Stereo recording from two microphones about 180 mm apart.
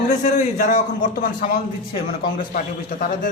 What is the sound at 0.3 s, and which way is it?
Speech, 50° left (ahead or behind).